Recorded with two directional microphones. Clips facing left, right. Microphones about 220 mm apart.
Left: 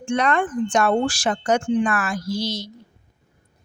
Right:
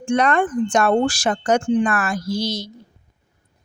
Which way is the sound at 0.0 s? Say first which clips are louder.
Right 3 dB; 45° right (ahead or behind).